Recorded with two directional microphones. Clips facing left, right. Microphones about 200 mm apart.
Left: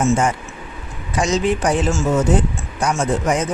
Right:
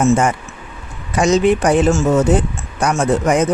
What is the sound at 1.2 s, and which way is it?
Speech, 60° right (ahead or behind).